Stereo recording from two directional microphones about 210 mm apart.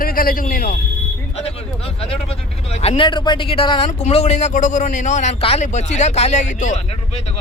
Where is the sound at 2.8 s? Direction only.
25° left (ahead or behind).